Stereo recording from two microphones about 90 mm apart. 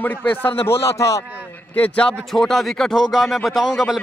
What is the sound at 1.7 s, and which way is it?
Speech, 15° left (ahead or behind).